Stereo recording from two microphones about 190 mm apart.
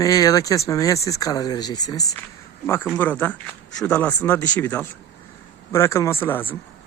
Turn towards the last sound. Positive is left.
turn(degrees=10)  # may be behind; listen again after turning